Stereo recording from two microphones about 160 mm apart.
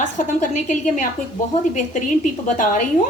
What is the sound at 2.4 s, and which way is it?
Speech, 55° left (ahead or behind).